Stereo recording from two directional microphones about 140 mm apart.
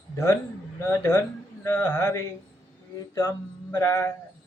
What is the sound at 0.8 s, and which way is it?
Speech, 15° left (ahead or behind).